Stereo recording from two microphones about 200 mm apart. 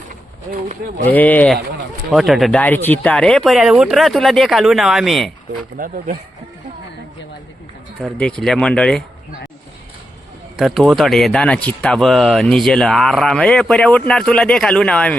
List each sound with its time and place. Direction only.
0.5 s speech: 40° right (ahead or behind)
1.1 s speech: 10° left (ahead or behind)
2.0 s speech: centre (ahead or behind)
5.7 s speech: 45° right (ahead or behind)
8.4 s speech: 5° left (ahead or behind)
10.6 s speech: centre (ahead or behind)